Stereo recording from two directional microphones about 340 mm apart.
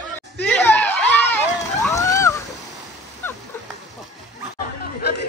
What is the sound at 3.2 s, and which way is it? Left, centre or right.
Dog, centre.